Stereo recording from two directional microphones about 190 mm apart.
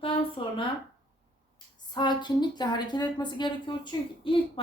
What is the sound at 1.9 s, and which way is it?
A woman's voice, 25° left (ahead or behind).